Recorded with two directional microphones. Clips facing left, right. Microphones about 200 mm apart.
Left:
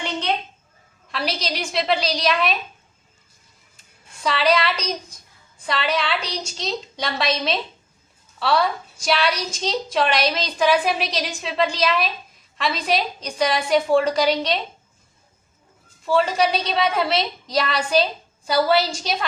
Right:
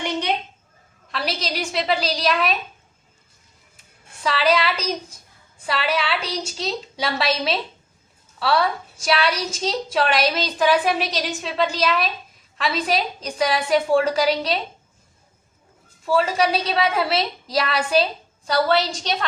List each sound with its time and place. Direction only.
0.0 s a sound: 10° right (ahead or behind)
1.1 s a woman's voice: centre (ahead or behind)
4.2 s a woman's voice: centre (ahead or behind)
16.0 s a woman's voice: centre (ahead or behind)